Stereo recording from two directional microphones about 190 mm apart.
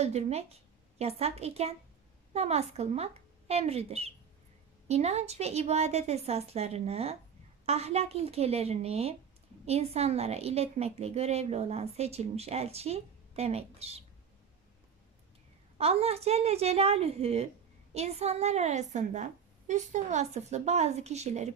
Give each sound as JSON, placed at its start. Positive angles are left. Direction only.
{"t": 0.0, "sound": "a woman's voice", "side_deg": -35}
{"t": 15.8, "sound": "a woman's voice", "side_deg": -30}